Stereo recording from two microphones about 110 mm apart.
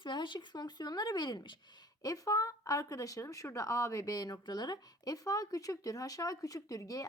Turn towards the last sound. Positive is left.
turn(degrees=30)  # may be behind; listen again after turning